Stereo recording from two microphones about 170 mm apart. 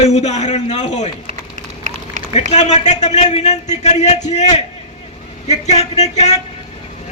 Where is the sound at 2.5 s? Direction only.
45° left (ahead or behind).